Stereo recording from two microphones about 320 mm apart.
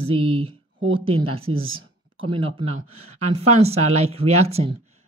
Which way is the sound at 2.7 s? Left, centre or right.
Right.